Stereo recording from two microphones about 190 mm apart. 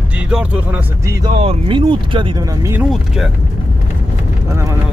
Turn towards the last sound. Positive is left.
turn(degrees=-15)  # may be behind; listen again after turning